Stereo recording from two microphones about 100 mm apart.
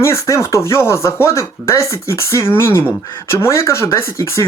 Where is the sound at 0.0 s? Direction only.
30° left (ahead or behind).